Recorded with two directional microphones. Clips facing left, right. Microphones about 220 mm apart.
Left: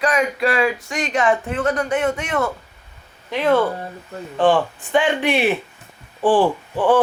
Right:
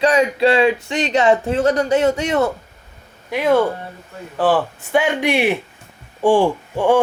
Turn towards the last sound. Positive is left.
turn(degrees=-10)  # may be behind; listen again after turning